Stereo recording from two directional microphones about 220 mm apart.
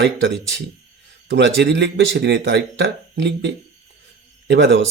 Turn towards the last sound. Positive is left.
turn(degrees=-55)  # may be behind; listen again after turning